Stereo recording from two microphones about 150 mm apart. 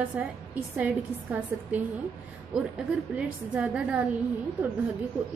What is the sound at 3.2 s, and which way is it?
Speech, 10° right (ahead or behind).